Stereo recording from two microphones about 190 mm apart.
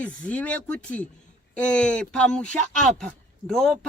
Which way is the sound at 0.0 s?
5° left (ahead or behind).